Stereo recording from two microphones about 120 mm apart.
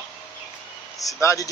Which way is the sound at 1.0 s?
25° left (ahead or behind).